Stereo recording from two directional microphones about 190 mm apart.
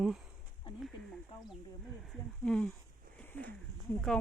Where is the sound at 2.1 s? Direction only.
5° left (ahead or behind).